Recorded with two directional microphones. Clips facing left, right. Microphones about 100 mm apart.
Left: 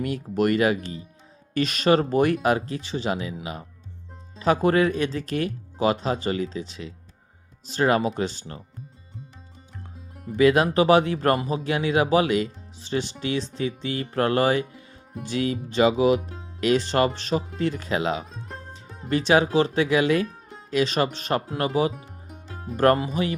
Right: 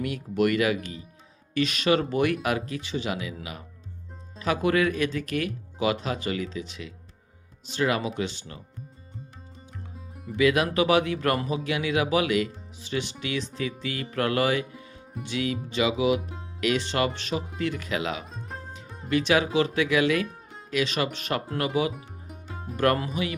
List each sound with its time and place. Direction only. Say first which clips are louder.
0.0 s speech: left 1 dB; 35° left (ahead or behind)
4.4 s speech: left 4 dB; 35° left (ahead or behind)
10.3 s speech: left 4 dB; 35° left (ahead or behind)
18.3 s music: even; centre (ahead or behind)
19.0 s speech: left 3 dB; 35° left (ahead or behind)
20.2 s music: left 3 dB; centre (ahead or behind)
20.7 s speech: left 4 dB; 35° left (ahead or behind)
21.9 s music: left 1 dB; centre (ahead or behind)
23.0 s speech: left 4 dB; 35° left (ahead or behind)